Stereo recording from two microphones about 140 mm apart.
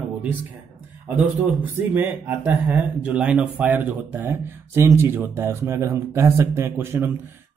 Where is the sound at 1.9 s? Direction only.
15° right (ahead or behind).